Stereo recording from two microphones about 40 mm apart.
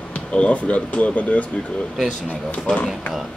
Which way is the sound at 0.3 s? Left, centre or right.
Left.